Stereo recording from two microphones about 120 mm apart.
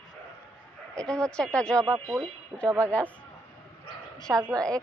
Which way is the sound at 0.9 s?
5° left (ahead or behind).